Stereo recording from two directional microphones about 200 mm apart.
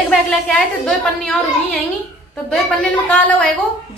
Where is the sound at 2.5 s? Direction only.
5° left (ahead or behind).